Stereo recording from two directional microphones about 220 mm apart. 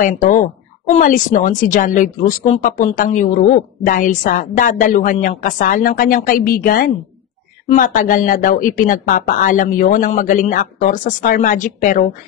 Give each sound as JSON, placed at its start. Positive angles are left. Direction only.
{"t": 0.0, "sound": "a woman's voice", "side_deg": 35}